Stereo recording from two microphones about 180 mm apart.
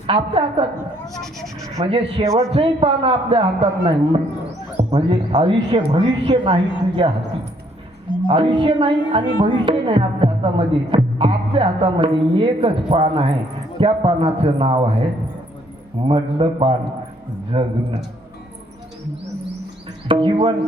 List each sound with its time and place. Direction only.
0.1 s speech: 30° right (ahead or behind)
1.2 s speech: centre (ahead or behind)
1.8 s speech: 35° right (ahead or behind)
2.2 s a man's voice: 15° right (ahead or behind)
2.5 s a woman's voice: 30° right (ahead or behind)
8.3 s speech: 30° right (ahead or behind)
16.0 s speech: 30° right (ahead or behind)
20.1 s a woman's voice: 30° right (ahead or behind)